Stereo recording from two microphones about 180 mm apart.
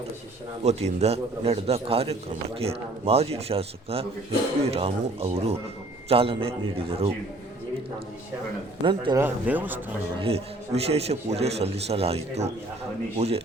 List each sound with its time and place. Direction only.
0.6 s a man's voice: 35° right (ahead or behind)
8.8 s a man's voice: 25° right (ahead or behind)
9.2 s speech: 10° right (ahead or behind)
10.2 s a man's voice: 35° right (ahead or behind)